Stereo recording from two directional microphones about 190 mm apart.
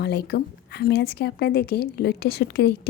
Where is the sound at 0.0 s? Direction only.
60° left (ahead or behind).